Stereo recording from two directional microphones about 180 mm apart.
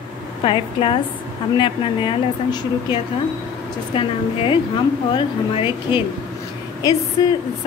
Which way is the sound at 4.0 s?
30° left (ahead or behind).